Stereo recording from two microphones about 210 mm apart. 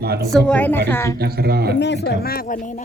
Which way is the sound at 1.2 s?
50° right (ahead or behind).